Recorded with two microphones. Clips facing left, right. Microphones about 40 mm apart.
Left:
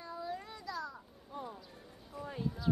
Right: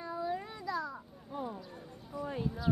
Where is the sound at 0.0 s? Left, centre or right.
Centre.